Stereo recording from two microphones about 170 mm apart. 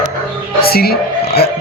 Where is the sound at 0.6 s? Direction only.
65° left (ahead or behind).